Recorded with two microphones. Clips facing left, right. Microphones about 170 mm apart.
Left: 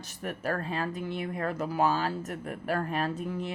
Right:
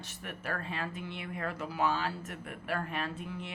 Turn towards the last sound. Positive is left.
turn(degrees=40)  # may be behind; listen again after turning